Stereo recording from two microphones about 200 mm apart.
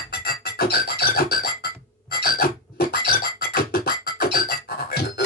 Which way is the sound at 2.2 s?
50° left (ahead or behind).